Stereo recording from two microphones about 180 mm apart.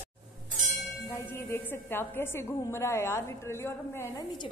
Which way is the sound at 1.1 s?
15° left (ahead or behind).